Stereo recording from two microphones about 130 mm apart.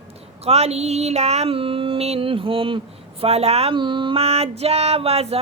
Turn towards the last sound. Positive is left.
turn(degrees=-50)  # may be behind; listen again after turning